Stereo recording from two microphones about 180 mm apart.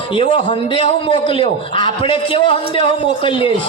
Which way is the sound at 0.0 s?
30° left (ahead or behind).